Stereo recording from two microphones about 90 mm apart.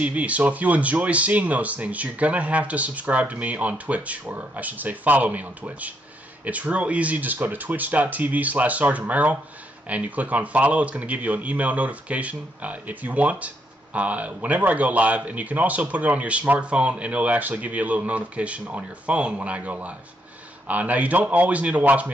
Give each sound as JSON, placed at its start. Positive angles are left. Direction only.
{"t": 0.0, "sound": "speech", "side_deg": -15}